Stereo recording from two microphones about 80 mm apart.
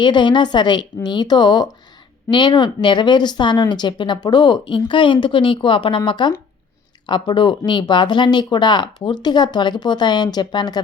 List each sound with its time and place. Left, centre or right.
0.0 s a woman's voice: left
6.1 s a woman's voice: left